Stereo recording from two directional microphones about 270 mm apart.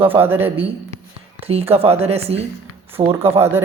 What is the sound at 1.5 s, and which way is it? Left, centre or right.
A woman's voice, right.